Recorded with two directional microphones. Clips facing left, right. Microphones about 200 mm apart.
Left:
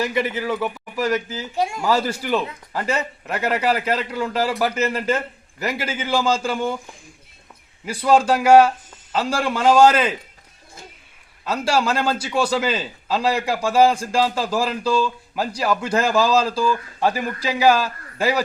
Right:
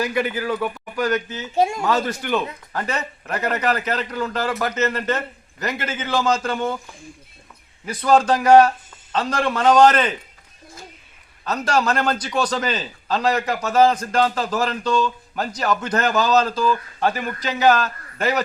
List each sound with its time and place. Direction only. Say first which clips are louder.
0.0 s a man's voice: even; centre (ahead or behind)
1.5 s speech: right 4 dB; 25° right (ahead or behind)
1.8 s a man's voice: left 1 dB; 10° left (ahead or behind)
8.1 s a man's voice: even; 10° left (ahead or behind)
11.4 s a man's voice: even; 5° left (ahead or behind)